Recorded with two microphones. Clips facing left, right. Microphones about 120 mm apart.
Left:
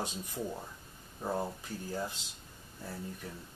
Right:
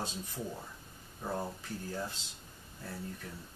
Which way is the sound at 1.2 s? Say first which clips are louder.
Left 3 dB; 10° left (ahead or behind).